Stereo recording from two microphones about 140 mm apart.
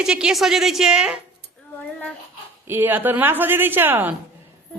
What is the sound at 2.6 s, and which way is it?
Speech, 15° right (ahead or behind).